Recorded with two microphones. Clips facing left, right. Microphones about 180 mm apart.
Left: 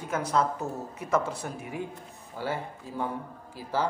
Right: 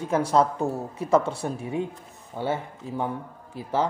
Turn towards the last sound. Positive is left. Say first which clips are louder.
# right 3 dB
turn(degrees=-25)  # may be behind; listen again after turning